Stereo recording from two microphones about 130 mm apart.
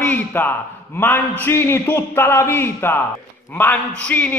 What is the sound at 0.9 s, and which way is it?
A man's voice, 15° left (ahead or behind).